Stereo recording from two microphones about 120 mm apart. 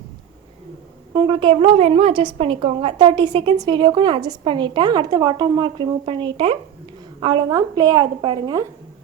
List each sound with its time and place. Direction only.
1.3 s a woman's voice: 45° right (ahead or behind)